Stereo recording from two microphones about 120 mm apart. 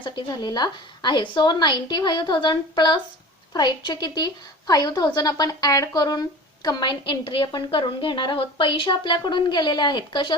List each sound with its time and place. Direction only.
0.0 s a woman's voice: 35° left (ahead or behind)